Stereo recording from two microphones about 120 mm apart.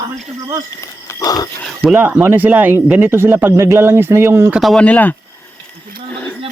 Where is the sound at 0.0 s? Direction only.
30° right (ahead or behind).